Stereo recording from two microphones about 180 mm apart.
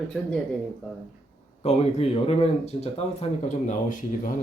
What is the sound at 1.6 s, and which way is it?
Speech, 35° left (ahead or behind).